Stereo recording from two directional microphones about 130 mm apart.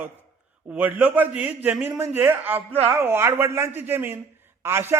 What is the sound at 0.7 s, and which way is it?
A man's voice, 10° right (ahead or behind).